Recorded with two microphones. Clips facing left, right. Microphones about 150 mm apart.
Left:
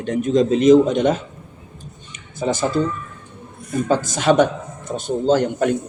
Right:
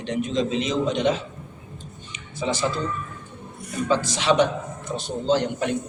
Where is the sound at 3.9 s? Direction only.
50° left (ahead or behind).